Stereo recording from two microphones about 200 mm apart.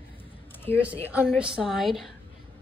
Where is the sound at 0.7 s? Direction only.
30° right (ahead or behind).